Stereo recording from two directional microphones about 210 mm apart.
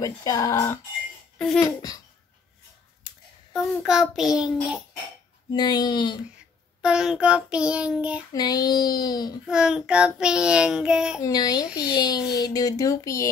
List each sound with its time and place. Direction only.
0.0 s speech: 15° left (ahead or behind)
3.1 s a sound: 25° left (ahead or behind)
3.5 s child singing: 5° right (ahead or behind)
5.5 s speech: 20° left (ahead or behind)
6.8 s child singing: 5° right (ahead or behind)
8.3 s speech: 20° left (ahead or behind)
9.5 s child singing: 5° right (ahead or behind)
11.1 s speech: 15° left (ahead or behind)